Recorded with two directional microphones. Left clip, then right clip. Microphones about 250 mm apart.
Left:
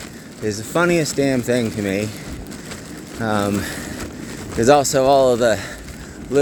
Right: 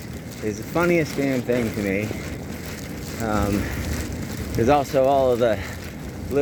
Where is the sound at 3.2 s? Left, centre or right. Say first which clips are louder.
Left 4 dB; left.